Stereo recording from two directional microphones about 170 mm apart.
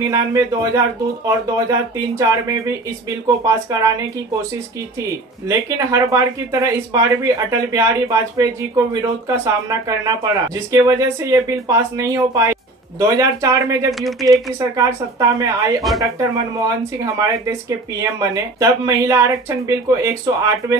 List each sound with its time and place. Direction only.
0.0 s speech: 20° right (ahead or behind)
5.5 s speech: 20° right (ahead or behind)